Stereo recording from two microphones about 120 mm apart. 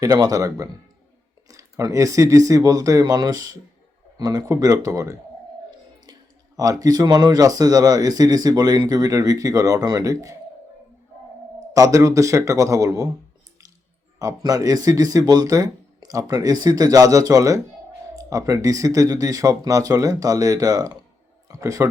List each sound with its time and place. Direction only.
0.0 s speech: 30° right (ahead or behind)
6.6 s speech: 30° right (ahead or behind)
11.7 s speech: 25° right (ahead or behind)
14.2 s speech: 30° right (ahead or behind)